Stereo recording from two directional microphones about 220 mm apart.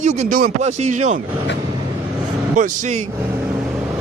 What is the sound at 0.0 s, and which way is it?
Speech, 35° right (ahead or behind).